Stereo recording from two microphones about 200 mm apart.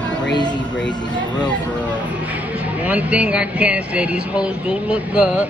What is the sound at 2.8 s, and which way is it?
Speech, 5° right (ahead or behind).